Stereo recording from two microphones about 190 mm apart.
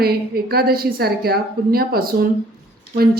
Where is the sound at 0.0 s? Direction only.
55° right (ahead or behind).